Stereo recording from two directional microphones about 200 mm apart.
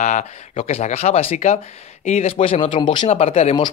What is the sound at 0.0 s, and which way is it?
Speech, 35° left (ahead or behind).